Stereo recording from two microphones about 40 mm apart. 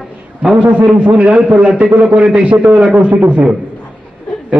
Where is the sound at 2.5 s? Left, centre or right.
Right.